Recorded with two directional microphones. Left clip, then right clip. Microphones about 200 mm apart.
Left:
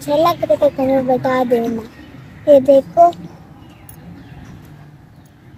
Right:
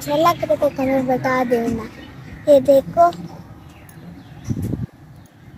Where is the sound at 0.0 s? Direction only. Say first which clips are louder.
Left 2 dB; centre (ahead or behind).